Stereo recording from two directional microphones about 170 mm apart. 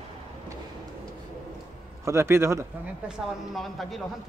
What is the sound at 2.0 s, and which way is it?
Speech, 15° right (ahead or behind).